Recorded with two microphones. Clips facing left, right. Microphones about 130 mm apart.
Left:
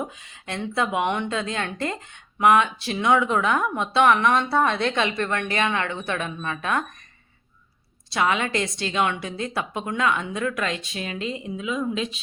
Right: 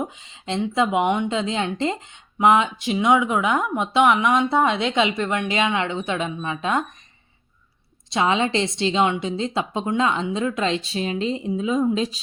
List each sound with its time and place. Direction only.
0.0 s a woman's voice: 20° right (ahead or behind)
8.1 s a woman's voice: 25° right (ahead or behind)